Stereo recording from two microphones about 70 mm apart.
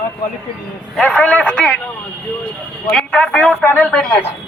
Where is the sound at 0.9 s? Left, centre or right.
Centre.